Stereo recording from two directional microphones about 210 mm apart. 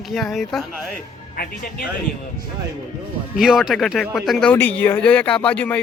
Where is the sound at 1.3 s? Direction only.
45° left (ahead or behind).